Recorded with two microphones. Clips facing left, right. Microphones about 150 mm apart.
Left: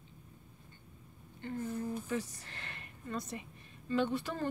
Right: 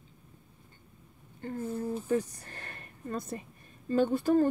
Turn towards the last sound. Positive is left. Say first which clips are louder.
# right 8 dB
turn(degrees=-45)  # may be behind; listen again after turning